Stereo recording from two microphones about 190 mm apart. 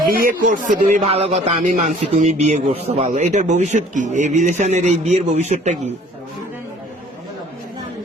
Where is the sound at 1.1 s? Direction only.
30° right (ahead or behind).